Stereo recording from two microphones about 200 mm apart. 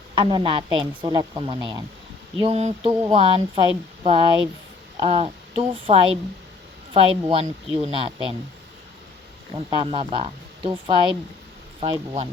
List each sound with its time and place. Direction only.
0.2 s speech: 25° right (ahead or behind)
9.6 s speech: 25° right (ahead or behind)